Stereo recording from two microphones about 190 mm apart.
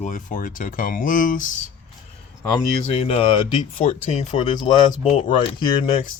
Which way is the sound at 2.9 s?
30° left (ahead or behind).